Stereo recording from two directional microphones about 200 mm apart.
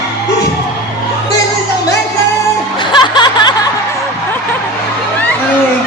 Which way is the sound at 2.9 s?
20° left (ahead or behind).